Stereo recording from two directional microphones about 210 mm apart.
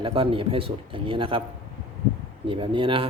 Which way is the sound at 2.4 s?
25° right (ahead or behind).